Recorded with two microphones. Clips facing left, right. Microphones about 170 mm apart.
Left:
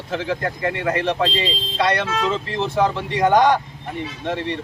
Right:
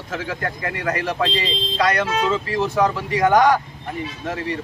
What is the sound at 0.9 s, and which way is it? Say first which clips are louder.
Speech: left 3 dB; 25° left (ahead or behind).